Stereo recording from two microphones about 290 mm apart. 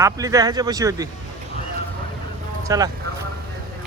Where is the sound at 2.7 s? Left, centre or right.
Centre.